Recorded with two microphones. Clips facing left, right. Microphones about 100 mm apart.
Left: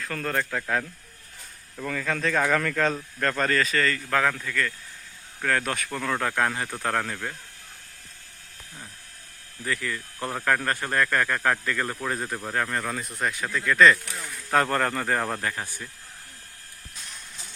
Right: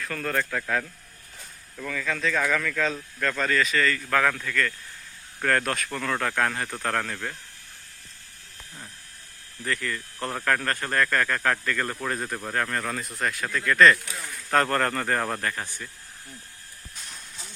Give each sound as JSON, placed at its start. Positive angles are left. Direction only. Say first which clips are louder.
{"t": 0.0, "sound": "speech", "louder": "even", "side_deg": 30}
{"t": 0.3, "sound": "speech", "louder": "even", "side_deg": 15}
{"t": 1.9, "sound": "speech", "louder": "left 1 dB", "side_deg": 35}
{"t": 2.6, "sound": "speech", "louder": "left 2 dB", "side_deg": 45}
{"t": 4.2, "sound": "speech", "louder": "right 1 dB", "side_deg": 10}
{"t": 9.6, "sound": "speech", "louder": "even", "side_deg": 5}